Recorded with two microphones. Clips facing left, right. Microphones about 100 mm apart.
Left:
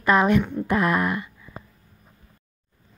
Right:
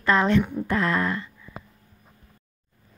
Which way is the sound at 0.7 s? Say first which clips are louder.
Left 2 dB; 15° left (ahead or behind).